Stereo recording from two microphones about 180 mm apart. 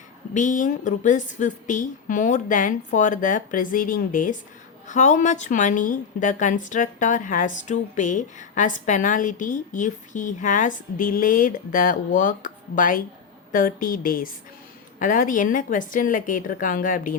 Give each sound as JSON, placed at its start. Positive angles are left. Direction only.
{"t": 0.3, "sound": "a woman's voice", "side_deg": 45}